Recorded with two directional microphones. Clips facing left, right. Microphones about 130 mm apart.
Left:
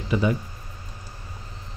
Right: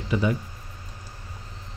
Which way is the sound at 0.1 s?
20° left (ahead or behind).